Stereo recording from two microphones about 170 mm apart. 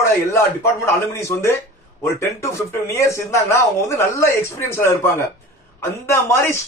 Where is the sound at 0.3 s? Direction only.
15° left (ahead or behind).